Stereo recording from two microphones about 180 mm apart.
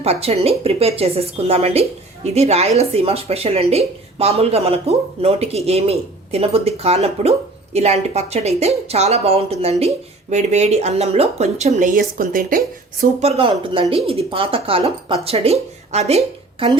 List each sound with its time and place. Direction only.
0.0 s speech: 35° right (ahead or behind); by 13.1 s 50° right (ahead or behind)
13.2 s speech: 30° right (ahead or behind)